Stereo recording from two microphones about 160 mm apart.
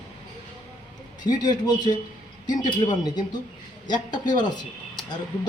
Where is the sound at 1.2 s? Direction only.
25° left (ahead or behind).